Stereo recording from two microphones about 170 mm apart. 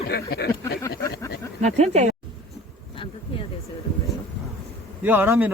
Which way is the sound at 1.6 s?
40° right (ahead or behind).